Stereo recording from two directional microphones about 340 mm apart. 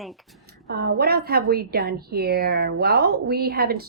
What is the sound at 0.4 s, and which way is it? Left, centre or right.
A woman's voice, right.